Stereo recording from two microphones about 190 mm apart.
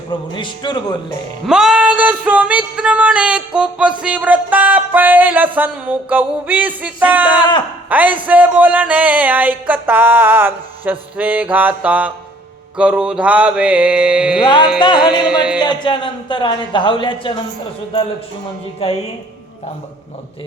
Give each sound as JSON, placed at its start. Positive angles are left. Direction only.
{"t": 0.1, "sound": "speech", "side_deg": 25}
{"t": 1.5, "sound": "a sound", "side_deg": -5}
{"t": 7.9, "sound": "a man's voice", "side_deg": -10}
{"t": 8.3, "sound": "a sound", "side_deg": -10}
{"t": 12.7, "sound": "mantra", "side_deg": -5}
{"t": 14.4, "sound": "speech", "side_deg": 25}
{"t": 15.3, "sound": "mantra", "side_deg": -5}
{"t": 15.5, "sound": "speech", "side_deg": 25}
{"t": 18.8, "sound": "a woman's voice", "side_deg": 30}